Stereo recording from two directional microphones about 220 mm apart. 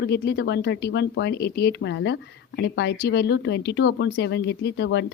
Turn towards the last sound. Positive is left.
turn(degrees=50)  # may be behind; listen again after turning